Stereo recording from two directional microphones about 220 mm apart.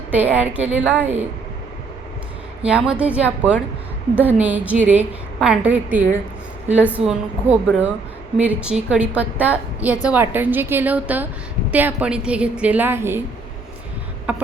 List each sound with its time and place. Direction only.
0.1 s a woman's voice: 5° right (ahead or behind)
2.6 s a woman's voice: 5° right (ahead or behind)
14.3 s a sound: 5° right (ahead or behind)